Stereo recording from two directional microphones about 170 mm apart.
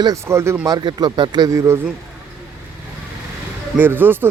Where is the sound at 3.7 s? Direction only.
10° right (ahead or behind).